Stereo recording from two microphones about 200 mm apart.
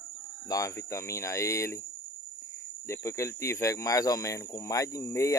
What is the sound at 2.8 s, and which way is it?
Speech, 15° left (ahead or behind).